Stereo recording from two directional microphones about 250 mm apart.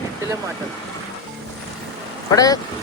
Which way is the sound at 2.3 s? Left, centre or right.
Centre.